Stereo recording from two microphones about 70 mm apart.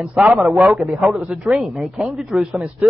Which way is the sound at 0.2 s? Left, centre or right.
Centre.